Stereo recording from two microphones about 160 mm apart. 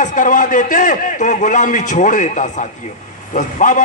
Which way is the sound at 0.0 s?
55° left (ahead or behind).